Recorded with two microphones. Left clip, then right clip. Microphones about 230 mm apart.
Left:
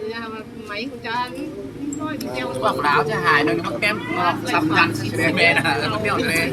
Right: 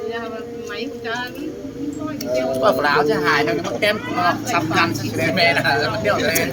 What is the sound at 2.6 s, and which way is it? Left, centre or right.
Speech, centre.